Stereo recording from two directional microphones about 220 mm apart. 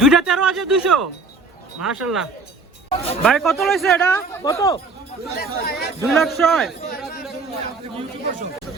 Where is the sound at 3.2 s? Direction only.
Centre (ahead or behind).